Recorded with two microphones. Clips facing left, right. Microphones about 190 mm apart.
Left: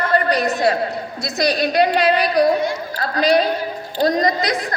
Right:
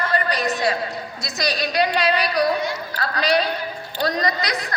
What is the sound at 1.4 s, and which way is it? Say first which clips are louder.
A woman's voice: left 5 dB; 55° left (ahead or behind).